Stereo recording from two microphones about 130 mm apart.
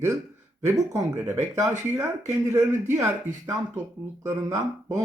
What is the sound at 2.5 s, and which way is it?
Speech, 20° right (ahead or behind).